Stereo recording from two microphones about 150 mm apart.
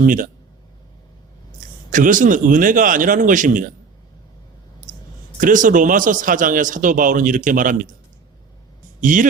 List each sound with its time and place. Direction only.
0.0 s a man's voice: 65° right (ahead or behind)
1.9 s a man's voice: 60° right (ahead or behind)
4.9 s a sound: 60° right (ahead or behind)
5.4 s a man's voice: 60° right (ahead or behind)
9.0 s speech: 60° right (ahead or behind)